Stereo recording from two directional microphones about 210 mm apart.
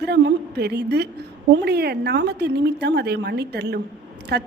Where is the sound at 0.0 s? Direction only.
55° right (ahead or behind).